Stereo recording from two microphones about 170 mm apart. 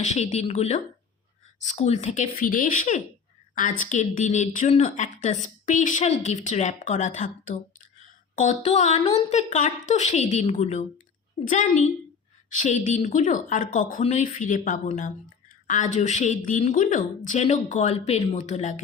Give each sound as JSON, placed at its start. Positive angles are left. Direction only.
{"t": 0.0, "sound": "a woman's voice", "side_deg": 40}